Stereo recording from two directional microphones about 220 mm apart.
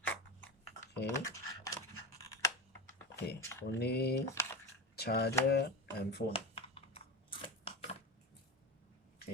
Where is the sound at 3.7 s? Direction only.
50° left (ahead or behind).